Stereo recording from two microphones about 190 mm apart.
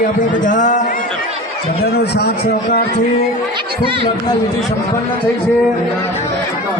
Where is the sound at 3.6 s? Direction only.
25° right (ahead or behind).